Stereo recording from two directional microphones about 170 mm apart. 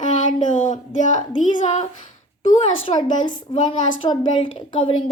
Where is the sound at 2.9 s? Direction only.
30° left (ahead or behind).